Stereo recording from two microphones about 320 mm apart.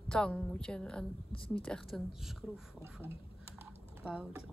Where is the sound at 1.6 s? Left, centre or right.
Centre.